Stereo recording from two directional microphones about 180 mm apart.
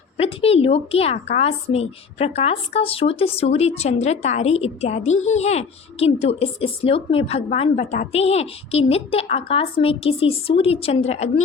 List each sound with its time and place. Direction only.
0.2 s speech: 30° left (ahead or behind)